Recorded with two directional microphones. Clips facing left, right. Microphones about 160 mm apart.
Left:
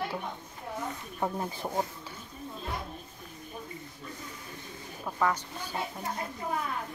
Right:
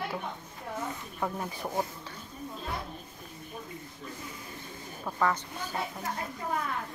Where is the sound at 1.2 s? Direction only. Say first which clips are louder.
Left 2 dB; 25° left (ahead or behind).